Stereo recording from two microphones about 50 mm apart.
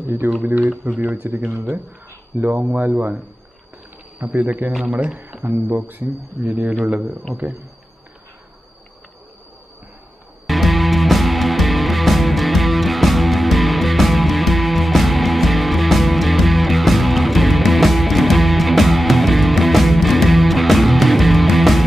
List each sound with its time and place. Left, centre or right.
0.2 s speech: right
4.2 s speech: right
4.6 s speech: centre
4.9 s speech: right
5.4 s speech: right
10.4 s music: centre